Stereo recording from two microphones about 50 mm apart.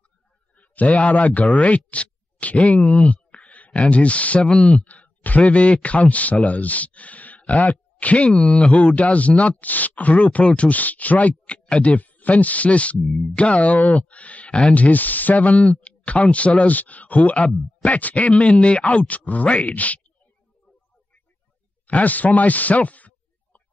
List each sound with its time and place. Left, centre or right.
0.6 s a man's voice: left
4.8 s speech: left
8.3 s speech: centre
14.7 s speech: left
21.8 s speech: left